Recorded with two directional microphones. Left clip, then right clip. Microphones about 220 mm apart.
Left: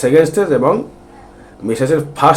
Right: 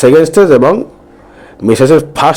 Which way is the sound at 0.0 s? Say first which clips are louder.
Right 6 dB; 40° right (ahead or behind).